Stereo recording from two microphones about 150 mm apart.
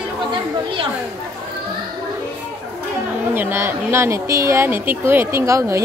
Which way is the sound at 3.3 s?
15° right (ahead or behind).